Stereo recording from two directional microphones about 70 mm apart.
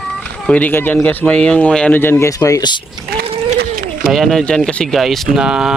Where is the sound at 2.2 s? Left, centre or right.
Left.